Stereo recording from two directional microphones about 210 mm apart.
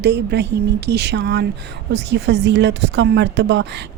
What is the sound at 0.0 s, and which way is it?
Speech, 55° right (ahead or behind).